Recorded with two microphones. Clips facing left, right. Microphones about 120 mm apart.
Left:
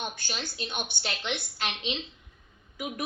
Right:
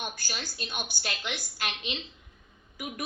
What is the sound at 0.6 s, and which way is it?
Speech, 5° right (ahead or behind).